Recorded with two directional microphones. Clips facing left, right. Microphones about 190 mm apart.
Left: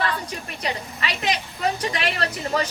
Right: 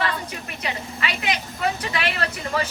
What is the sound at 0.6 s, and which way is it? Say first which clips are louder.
Speech: even; 35° left (ahead or behind).